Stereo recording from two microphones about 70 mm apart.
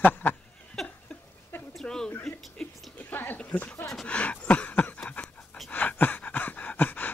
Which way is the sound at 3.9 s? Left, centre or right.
Centre.